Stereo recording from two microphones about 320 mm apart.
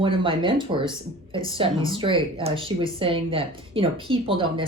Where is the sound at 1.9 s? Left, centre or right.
Centre.